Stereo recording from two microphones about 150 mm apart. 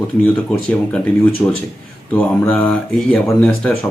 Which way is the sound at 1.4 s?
25° left (ahead or behind).